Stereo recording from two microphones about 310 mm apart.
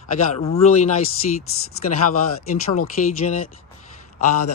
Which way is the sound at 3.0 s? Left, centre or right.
Left.